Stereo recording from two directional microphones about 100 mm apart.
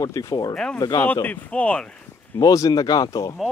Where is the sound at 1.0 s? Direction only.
20° left (ahead or behind).